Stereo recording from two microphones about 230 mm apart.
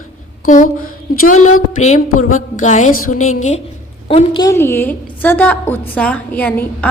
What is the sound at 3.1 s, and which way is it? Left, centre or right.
Speech, left.